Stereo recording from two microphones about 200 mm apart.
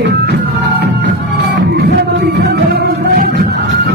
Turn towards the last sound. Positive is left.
turn(degrees=-55)  # may be behind; listen again after turning